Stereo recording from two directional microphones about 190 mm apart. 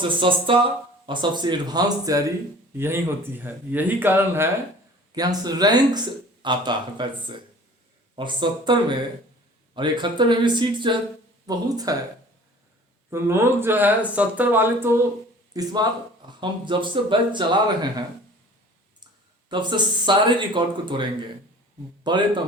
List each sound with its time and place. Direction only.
0.0 s speech: 25° right (ahead or behind)
13.1 s speech: 15° right (ahead or behind)
19.5 s speech: 25° right (ahead or behind)